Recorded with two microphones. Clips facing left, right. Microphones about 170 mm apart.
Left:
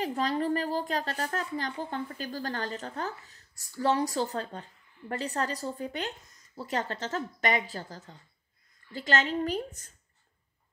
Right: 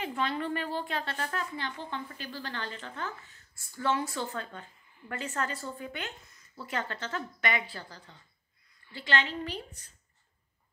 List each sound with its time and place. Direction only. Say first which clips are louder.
0.0 s a woman's voice: left 4 dB; 40° left (ahead or behind)